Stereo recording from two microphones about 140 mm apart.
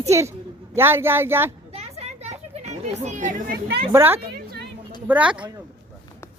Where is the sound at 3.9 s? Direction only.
15° right (ahead or behind).